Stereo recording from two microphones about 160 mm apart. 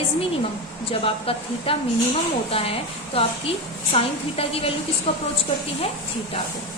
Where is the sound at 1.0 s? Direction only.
35° left (ahead or behind).